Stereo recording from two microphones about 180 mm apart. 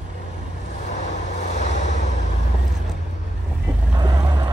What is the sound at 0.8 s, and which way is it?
Vehicle, 40° left (ahead or behind).